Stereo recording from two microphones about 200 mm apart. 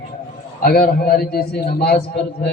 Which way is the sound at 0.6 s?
50° left (ahead or behind).